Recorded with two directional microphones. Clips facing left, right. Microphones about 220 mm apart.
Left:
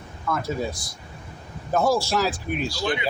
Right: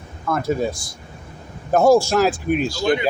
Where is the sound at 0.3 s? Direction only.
50° right (ahead or behind).